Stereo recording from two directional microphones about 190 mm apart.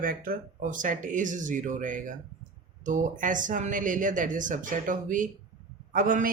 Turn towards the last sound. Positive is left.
turn(degrees=-45)  # may be behind; listen again after turning